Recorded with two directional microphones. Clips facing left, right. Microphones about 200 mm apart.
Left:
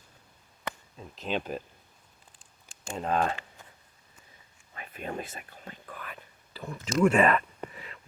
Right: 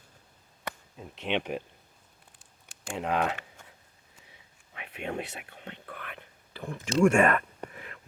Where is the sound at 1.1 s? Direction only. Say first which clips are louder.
Right 2 dB; 75° right (ahead or behind).